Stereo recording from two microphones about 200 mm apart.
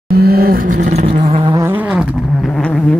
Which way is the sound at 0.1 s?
50° right (ahead or behind).